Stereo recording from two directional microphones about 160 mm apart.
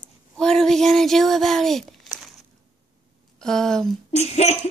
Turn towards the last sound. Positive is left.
turn(degrees=45)  # may be behind; listen again after turning